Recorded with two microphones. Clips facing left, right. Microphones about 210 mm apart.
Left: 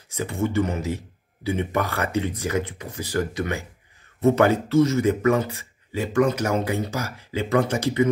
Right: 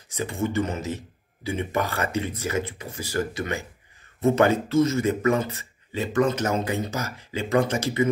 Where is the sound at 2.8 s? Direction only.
10° right (ahead or behind).